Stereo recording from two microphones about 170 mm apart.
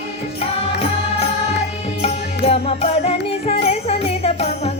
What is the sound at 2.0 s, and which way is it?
Music, 35° left (ahead or behind).